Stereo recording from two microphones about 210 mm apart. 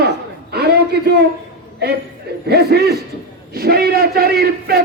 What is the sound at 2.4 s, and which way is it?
A man's voice, 50° right (ahead or behind).